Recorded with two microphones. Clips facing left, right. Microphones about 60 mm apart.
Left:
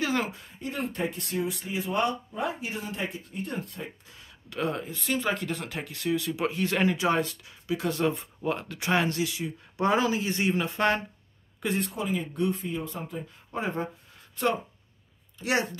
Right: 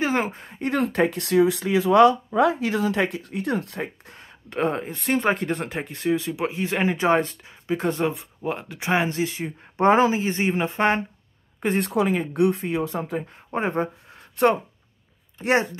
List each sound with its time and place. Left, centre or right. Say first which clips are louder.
0.0 s speech: right 5 dB; right
0.5 s speech: right 9 dB; right
4.5 s speech: right 6 dB; right
4.8 s speech: right 6 dB; right
6.3 s speech: right 2 dB; centre
7.0 s speech: right 5 dB; right
8.1 s speech: right 1 dB; centre
9.2 s speech: right 4 dB; right
11.8 s speech: right 8 dB; right
12.2 s speech: right 7 dB; right
13.5 s speech: right 6 dB; right
15.3 s speech: right 6 dB; right